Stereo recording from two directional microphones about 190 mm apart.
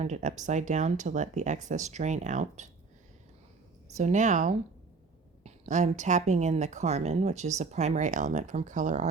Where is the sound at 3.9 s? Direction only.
40° right (ahead or behind).